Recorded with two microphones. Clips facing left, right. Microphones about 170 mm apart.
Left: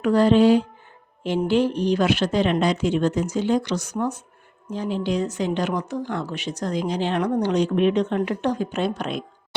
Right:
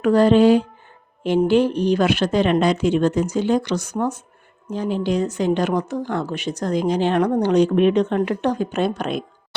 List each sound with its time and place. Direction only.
0.0 s a woman's voice: 55° right (ahead or behind)